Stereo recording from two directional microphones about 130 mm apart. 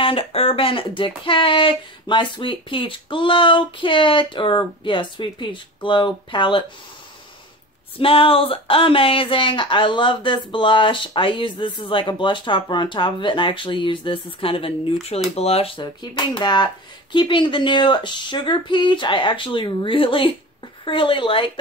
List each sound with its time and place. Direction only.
0.0 s speech: 45° left (ahead or behind)
8.0 s speech: 45° left (ahead or behind)